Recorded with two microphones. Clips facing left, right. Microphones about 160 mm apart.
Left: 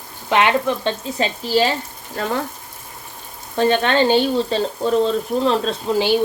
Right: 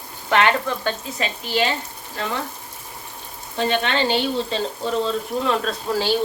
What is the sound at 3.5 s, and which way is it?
Speech, 45° left (ahead or behind).